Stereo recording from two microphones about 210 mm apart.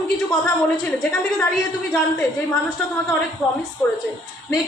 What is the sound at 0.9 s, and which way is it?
Speech, 10° left (ahead or behind).